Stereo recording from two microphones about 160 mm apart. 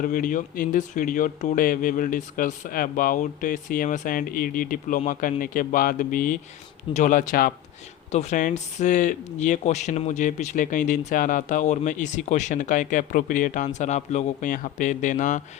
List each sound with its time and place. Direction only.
0.0 s speech: 60° left (ahead or behind)
8.1 s speech: 45° left (ahead or behind)